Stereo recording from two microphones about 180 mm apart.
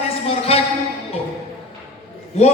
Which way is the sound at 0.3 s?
35° left (ahead or behind).